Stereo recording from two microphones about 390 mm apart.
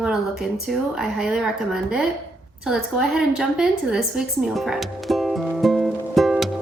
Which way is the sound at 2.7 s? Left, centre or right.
Centre.